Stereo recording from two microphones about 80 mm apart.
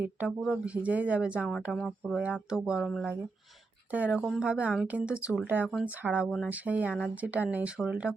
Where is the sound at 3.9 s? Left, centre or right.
Centre.